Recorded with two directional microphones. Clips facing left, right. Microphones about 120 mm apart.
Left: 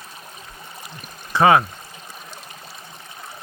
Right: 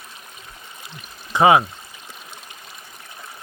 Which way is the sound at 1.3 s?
15° right (ahead or behind).